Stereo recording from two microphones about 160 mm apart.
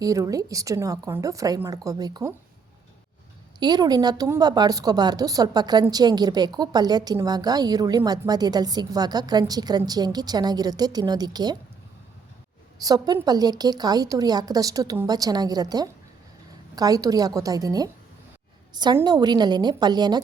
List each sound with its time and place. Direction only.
0.0 s a woman's voice: 20° right (ahead or behind)
3.6 s a woman's voice: 25° right (ahead or behind)
12.8 s a woman's voice: 25° right (ahead or behind)